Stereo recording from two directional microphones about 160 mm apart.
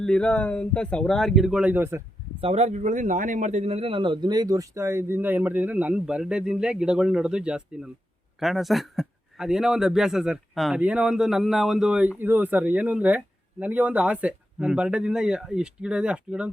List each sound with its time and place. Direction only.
0.0 s speech: 5° left (ahead or behind); by 2.0 s 15° right (ahead or behind)
2.4 s speech: 40° right (ahead or behind); by 16.5 s 5° right (ahead or behind)